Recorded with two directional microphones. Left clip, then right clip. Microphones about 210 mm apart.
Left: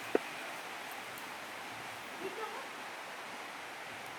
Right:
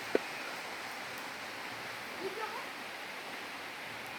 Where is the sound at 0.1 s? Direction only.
15° left (ahead or behind).